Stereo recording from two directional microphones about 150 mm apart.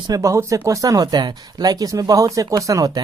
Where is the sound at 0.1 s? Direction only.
20° right (ahead or behind).